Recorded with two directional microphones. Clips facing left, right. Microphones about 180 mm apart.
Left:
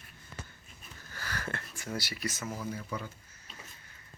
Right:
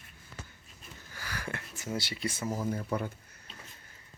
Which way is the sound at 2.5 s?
50° right (ahead or behind).